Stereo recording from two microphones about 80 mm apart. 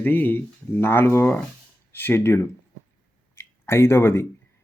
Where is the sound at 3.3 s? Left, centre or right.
Left.